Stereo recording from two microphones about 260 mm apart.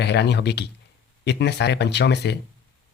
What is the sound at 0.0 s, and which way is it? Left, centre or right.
Speech, left.